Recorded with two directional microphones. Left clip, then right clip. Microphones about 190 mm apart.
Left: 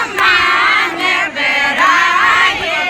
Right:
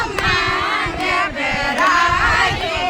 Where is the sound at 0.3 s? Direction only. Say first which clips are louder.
Left 7 dB; 35° left (ahead or behind).